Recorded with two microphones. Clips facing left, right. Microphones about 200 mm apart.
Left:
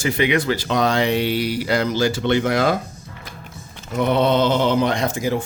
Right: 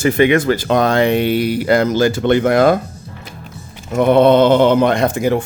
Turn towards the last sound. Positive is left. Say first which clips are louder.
# right 6 dB
turn(degrees=-60)  # may be behind; listen again after turning